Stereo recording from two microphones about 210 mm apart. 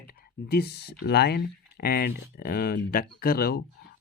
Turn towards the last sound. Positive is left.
turn(degrees=45)  # may be behind; listen again after turning